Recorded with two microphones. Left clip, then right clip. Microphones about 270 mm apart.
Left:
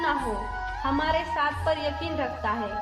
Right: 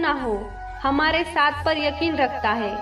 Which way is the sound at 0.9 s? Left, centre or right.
Right.